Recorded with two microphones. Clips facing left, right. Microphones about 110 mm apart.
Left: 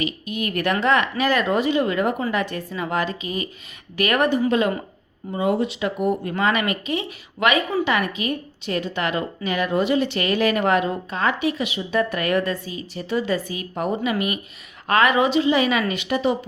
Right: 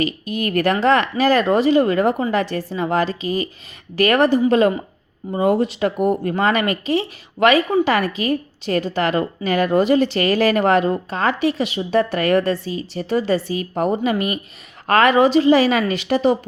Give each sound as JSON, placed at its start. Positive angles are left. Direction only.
{"t": 0.0, "sound": "speech", "side_deg": -40}